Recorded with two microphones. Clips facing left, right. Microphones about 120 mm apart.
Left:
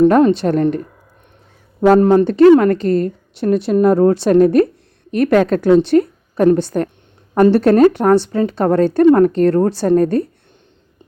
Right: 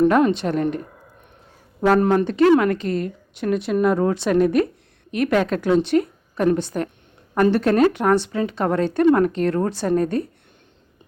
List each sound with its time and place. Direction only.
0.1 s a woman's voice: 35° left (ahead or behind)
1.8 s a woman's voice: 30° left (ahead or behind)